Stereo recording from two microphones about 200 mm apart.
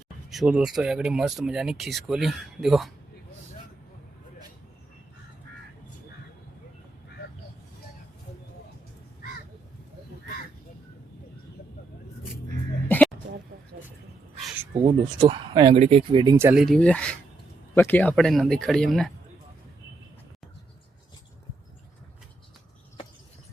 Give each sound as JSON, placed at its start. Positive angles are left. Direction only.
{"t": 0.3, "sound": "speech", "side_deg": 0}
{"t": 12.9, "sound": "a sound", "side_deg": 5}
{"t": 15.2, "sound": "speech", "side_deg": -20}
{"t": 16.6, "sound": "speech", "side_deg": 0}